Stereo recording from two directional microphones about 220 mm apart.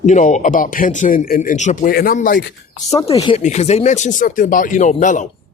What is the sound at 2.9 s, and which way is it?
A man's voice, 25° left (ahead or behind).